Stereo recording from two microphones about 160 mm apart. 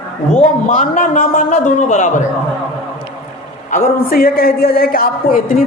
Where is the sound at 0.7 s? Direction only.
55° left (ahead or behind).